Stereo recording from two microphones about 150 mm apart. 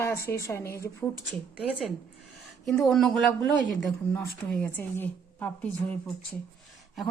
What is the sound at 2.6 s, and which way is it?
Speech, 5° left (ahead or behind).